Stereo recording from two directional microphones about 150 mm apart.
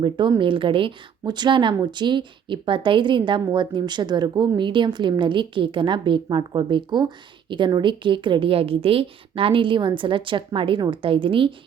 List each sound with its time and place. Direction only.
0.0 s speech: 30° right (ahead or behind)